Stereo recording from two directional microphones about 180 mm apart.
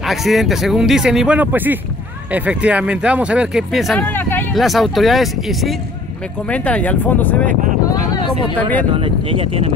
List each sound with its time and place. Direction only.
0.0 s speech: centre (ahead or behind)
4.1 s vehicle: 10° left (ahead or behind)
4.6 s speech: centre (ahead or behind)
8.9 s speech: 30° right (ahead or behind)